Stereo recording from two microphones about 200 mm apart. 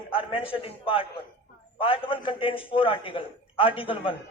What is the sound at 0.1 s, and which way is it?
A man's voice, 25° left (ahead or behind).